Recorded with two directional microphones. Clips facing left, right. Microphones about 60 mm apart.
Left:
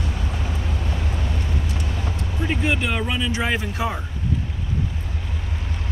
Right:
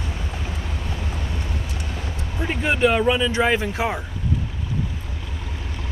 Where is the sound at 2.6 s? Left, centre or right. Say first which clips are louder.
Right 8 dB; right.